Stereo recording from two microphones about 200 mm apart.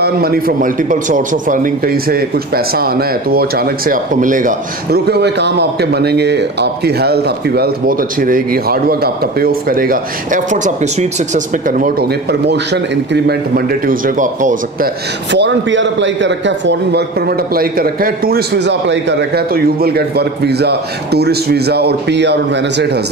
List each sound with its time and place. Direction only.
0.0 s a man's voice: 50° right (ahead or behind)
15.3 s a man's voice: 65° right (ahead or behind)